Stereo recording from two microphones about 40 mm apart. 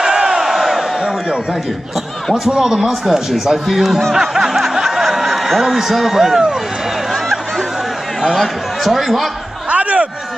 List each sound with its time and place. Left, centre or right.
0.0 s crowd: centre
2.4 s speech: centre
4.1 s snicker: centre
5.6 s speech: centre
7.1 s a sound: centre
8.2 s speech: centre
8.8 s speech: centre
9.7 s a sound: right